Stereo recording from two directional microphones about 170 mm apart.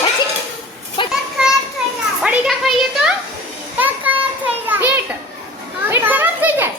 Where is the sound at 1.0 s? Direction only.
30° left (ahead or behind).